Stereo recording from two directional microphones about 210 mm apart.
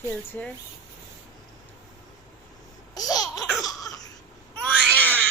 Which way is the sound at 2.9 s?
15° left (ahead or behind).